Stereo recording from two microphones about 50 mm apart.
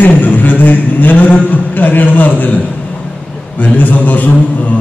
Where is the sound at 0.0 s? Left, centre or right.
Left.